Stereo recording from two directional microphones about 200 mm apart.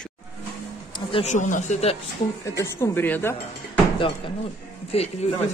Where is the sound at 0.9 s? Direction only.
30° left (ahead or behind).